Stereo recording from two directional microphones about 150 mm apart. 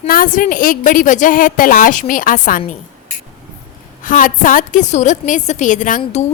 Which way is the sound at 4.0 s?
65° left (ahead or behind).